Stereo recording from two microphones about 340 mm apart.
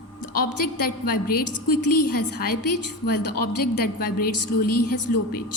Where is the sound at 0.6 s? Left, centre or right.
Left.